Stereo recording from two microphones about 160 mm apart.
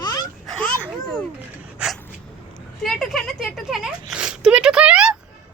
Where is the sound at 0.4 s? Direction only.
5° left (ahead or behind).